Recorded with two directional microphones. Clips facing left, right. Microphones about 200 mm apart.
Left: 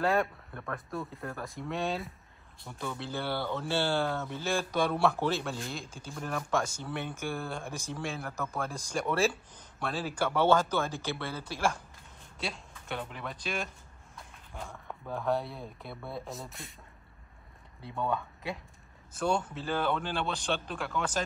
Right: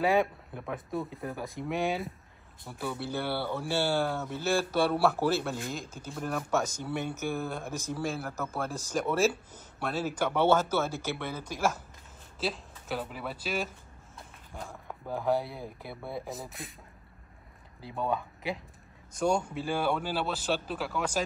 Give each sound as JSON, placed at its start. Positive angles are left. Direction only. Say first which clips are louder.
{"t": 0.0, "sound": "a man's voice", "louder": "right 2 dB", "side_deg": 0}
{"t": 5.7, "sound": "speech", "louder": "right 3 dB", "side_deg": -40}
{"t": 6.1, "sound": "a man's voice", "louder": "right 2 dB", "side_deg": -5}
{"t": 17.8, "sound": "speech", "louder": "right 1 dB", "side_deg": 0}
{"t": 19.1, "sound": "a man's voice", "louder": "right 2 dB", "side_deg": -10}